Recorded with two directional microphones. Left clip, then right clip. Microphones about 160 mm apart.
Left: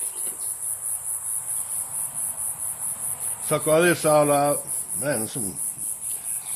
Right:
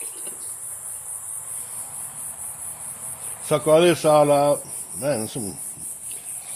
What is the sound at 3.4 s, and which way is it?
Speech, 40° right (ahead or behind).